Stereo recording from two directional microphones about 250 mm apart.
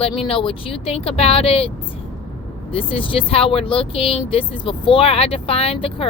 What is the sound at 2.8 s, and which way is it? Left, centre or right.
Speech, left.